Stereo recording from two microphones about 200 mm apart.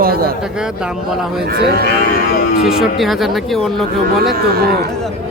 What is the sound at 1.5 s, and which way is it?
Cattle, 50° right (ahead or behind).